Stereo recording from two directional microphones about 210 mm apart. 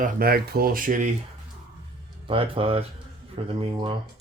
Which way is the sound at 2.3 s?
25° right (ahead or behind).